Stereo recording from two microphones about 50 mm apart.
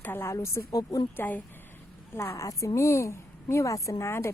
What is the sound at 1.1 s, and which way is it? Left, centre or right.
Speech, left.